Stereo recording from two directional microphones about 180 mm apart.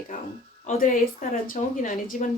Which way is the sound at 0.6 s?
45° left (ahead or behind).